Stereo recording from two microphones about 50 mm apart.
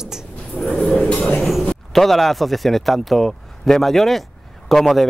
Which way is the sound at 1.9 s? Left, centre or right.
Centre.